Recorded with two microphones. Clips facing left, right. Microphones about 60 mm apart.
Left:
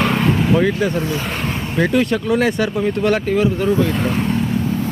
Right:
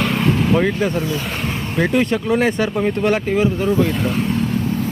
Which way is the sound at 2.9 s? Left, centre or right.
Centre.